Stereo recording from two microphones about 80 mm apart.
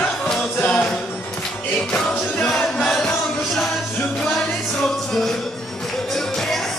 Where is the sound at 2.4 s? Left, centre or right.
Centre.